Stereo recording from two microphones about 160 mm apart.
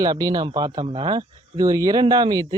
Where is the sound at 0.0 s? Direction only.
25° right (ahead or behind).